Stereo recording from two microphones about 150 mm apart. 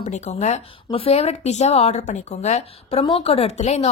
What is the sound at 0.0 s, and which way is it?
Speech, 45° left (ahead or behind).